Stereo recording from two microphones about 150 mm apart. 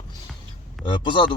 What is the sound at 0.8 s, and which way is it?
Speech, 35° left (ahead or behind).